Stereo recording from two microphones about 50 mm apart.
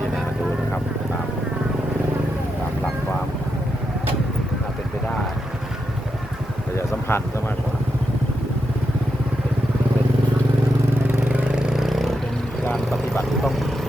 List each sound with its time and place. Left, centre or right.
7.1 s speech: left
11.7 s vehicle: centre